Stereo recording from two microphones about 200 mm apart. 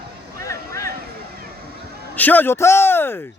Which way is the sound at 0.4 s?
15° left (ahead or behind).